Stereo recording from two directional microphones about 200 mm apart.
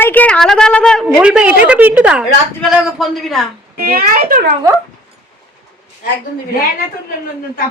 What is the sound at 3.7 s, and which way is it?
Speech, 45° right (ahead or behind).